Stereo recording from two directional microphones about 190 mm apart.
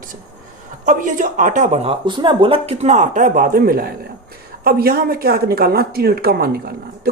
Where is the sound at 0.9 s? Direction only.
45° right (ahead or behind).